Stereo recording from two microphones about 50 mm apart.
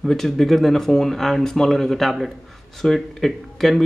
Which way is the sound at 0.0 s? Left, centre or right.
Centre.